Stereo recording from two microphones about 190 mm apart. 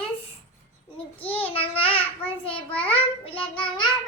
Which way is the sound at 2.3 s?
30° left (ahead or behind).